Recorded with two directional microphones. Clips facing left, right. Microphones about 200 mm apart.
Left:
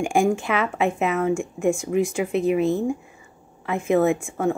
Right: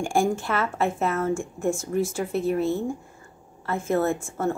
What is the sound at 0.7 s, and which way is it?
A woman's voice, 15° left (ahead or behind).